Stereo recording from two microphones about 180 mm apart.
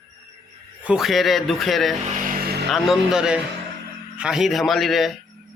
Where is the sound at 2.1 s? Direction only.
60° right (ahead or behind).